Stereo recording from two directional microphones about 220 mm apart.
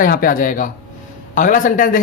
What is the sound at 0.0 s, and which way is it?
A man's voice, 40° left (ahead or behind).